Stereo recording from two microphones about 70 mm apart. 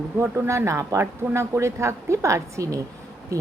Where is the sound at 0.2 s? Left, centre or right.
Right.